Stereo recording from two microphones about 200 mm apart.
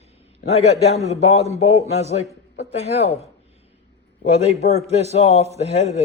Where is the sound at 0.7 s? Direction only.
30° left (ahead or behind).